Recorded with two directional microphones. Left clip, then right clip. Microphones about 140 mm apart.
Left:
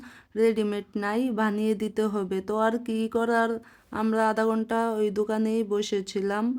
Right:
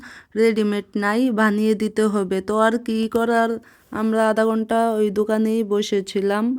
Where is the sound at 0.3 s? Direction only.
35° right (ahead or behind).